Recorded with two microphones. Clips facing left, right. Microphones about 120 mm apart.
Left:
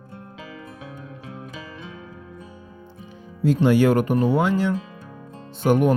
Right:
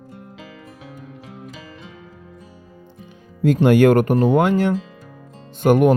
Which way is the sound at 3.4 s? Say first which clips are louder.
Right 4 dB; 55° right (ahead or behind).